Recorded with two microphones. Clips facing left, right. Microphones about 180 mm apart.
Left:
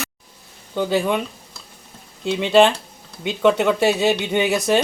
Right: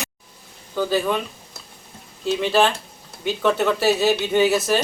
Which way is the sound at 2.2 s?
20° left (ahead or behind).